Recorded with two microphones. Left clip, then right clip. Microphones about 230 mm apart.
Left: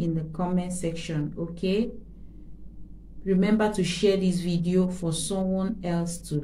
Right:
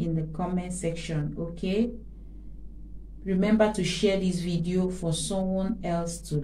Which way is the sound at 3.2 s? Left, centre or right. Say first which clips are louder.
Even; centre.